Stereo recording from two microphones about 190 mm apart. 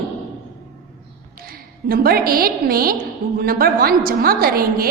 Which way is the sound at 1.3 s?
50° right (ahead or behind).